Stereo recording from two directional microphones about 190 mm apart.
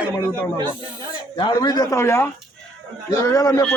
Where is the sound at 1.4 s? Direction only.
25° left (ahead or behind).